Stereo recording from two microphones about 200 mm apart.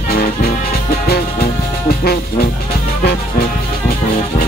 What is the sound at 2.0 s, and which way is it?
Music, 50° left (ahead or behind).